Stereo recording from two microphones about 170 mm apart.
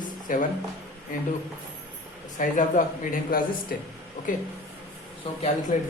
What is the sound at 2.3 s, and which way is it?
Speech, 50° left (ahead or behind).